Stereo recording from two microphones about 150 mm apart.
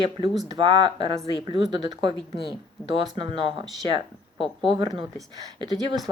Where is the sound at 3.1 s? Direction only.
35° right (ahead or behind).